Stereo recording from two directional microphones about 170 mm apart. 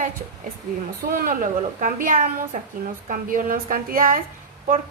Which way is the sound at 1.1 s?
55° right (ahead or behind).